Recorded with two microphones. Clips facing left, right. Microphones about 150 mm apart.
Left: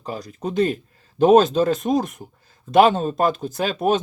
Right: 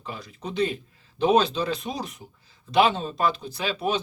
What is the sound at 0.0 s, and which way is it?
Speech, 40° left (ahead or behind).